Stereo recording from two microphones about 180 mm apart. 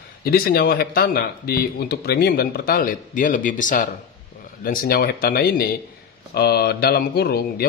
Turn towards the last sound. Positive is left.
turn(degrees=60)  # may be behind; listen again after turning